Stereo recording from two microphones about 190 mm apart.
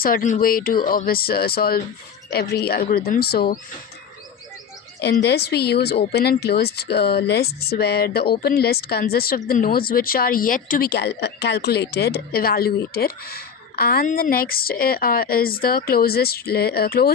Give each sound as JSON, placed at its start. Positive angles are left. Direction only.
{"t": 0.0, "sound": "a woman's voice", "side_deg": 50}
{"t": 4.9, "sound": "a woman's voice", "side_deg": 60}